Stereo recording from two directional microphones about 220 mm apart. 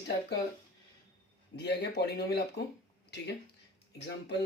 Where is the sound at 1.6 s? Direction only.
50° left (ahead or behind).